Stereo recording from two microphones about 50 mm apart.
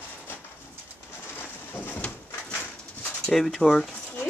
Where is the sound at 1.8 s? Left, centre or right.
Left.